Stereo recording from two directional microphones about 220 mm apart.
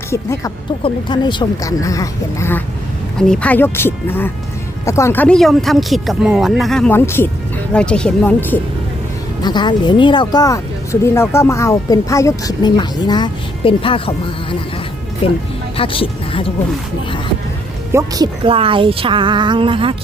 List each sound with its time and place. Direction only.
0.1 s speech: 15° left (ahead or behind)
9.4 s speech: 20° left (ahead or behind)
15.2 s speech: 25° left (ahead or behind)
17.9 s speech: 15° right (ahead or behind)